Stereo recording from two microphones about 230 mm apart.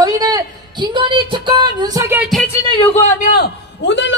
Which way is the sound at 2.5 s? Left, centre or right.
Centre.